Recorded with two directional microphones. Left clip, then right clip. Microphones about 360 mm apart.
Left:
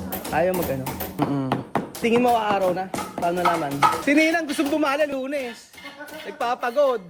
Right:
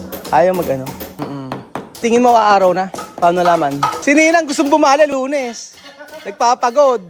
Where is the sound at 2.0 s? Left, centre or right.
Centre.